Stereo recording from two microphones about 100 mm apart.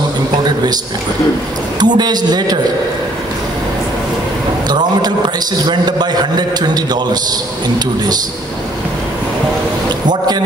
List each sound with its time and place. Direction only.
1.8 s a man's voice: 45° right (ahead or behind)
4.6 s a man's voice: 45° right (ahead or behind)
10.0 s a man's voice: 45° right (ahead or behind)